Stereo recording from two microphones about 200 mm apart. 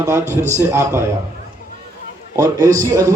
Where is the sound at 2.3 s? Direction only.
15° right (ahead or behind).